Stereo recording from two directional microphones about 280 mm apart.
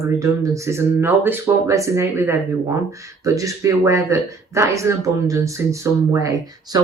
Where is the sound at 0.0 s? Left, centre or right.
Centre.